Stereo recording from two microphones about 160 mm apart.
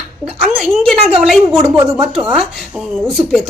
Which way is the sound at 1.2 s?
Centre (ahead or behind).